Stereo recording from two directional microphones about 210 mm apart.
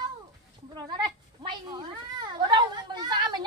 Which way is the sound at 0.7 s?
20° right (ahead or behind).